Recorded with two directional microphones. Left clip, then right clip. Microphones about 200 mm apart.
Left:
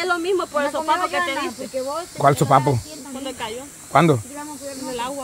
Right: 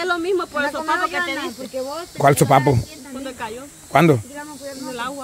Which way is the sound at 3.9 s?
20° right (ahead or behind).